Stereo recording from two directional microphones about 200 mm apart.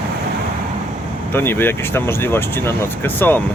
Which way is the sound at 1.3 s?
10° left (ahead or behind).